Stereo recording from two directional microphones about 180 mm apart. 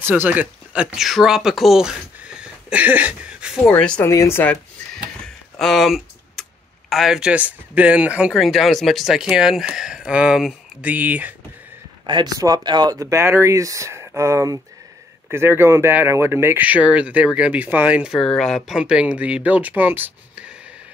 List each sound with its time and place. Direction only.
0.0 s speech: 10° right (ahead or behind)
3.7 s speech: 5° left (ahead or behind)
4.1 s a sound: 15° left (ahead or behind); by 6.4 s centre (ahead or behind)
6.9 s speech: centre (ahead or behind)
12.1 s speech: 20° right (ahead or behind)